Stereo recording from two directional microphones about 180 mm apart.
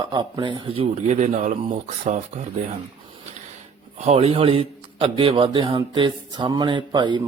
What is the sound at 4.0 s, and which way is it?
Speech, 35° right (ahead or behind).